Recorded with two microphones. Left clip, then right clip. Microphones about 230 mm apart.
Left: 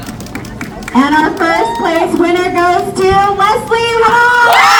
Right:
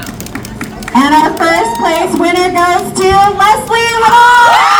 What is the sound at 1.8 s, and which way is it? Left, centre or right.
Speech, right.